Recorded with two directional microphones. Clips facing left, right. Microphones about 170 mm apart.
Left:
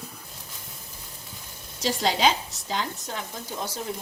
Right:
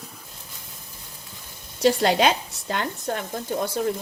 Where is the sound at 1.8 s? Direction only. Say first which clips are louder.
Right 5 dB; 60° right (ahead or behind).